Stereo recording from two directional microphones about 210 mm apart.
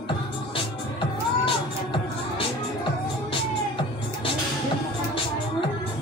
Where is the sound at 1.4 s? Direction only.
25° left (ahead or behind).